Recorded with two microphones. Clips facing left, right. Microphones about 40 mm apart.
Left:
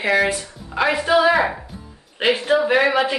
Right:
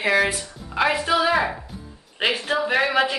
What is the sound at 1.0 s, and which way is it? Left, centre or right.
Speech, centre.